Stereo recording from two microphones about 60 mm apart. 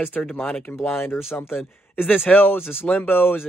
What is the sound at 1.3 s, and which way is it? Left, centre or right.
Speech, left.